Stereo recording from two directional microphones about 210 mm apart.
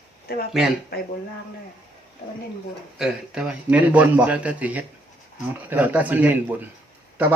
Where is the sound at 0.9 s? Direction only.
45° left (ahead or behind).